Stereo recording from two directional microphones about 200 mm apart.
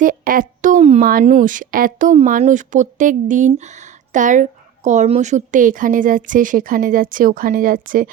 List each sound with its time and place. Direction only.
0.0 s speech: 40° right (ahead or behind)